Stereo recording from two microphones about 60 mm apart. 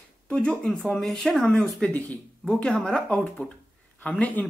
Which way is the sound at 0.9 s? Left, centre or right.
Centre.